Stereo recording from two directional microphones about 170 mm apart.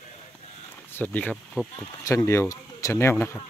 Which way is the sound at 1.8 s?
15° left (ahead or behind).